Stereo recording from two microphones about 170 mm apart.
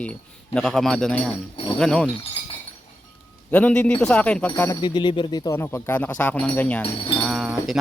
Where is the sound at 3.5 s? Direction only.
10° left (ahead or behind).